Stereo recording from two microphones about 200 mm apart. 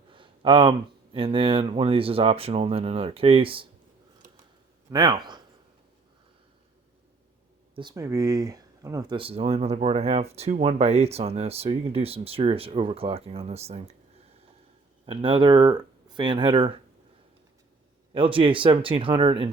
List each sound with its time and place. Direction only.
0.1 s a sound: 25° right (ahead or behind)
1.1 s speech: 25° right (ahead or behind)
4.9 s speech: 20° right (ahead or behind)
7.8 s speech: 20° right (ahead or behind)
15.0 s speech: 25° right (ahead or behind)
18.1 s speech: 25° right (ahead or behind)